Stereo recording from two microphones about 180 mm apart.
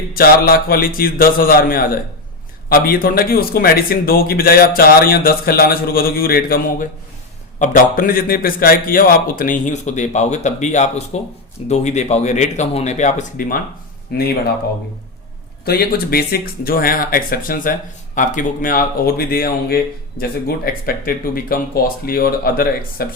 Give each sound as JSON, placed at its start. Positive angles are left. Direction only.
{"t": 0.1, "sound": "a man's voice", "side_deg": 55}
{"t": 15.6, "sound": "a man's voice", "side_deg": 60}